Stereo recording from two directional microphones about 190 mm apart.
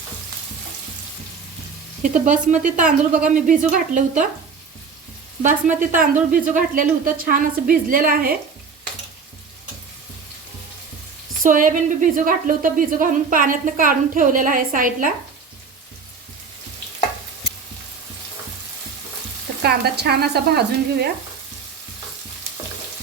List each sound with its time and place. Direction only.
2.0 s a woman's voice: 40° right (ahead or behind)
5.4 s a woman's voice: 40° right (ahead or behind)
11.4 s a woman's voice: 45° right (ahead or behind)
19.6 s sizzle: 55° right (ahead or behind)